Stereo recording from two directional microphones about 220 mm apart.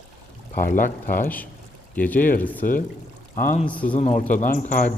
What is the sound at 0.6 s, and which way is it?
Speech, 35° left (ahead or behind).